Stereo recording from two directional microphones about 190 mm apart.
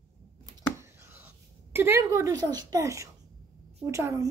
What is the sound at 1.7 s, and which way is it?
A woman's voice, 10° right (ahead or behind).